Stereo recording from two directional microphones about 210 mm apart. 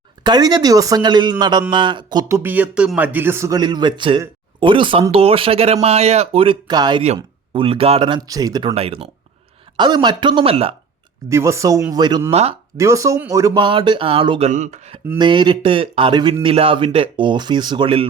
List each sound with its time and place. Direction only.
0.2 s speech: 20° right (ahead or behind)
11.3 s speech: 15° right (ahead or behind)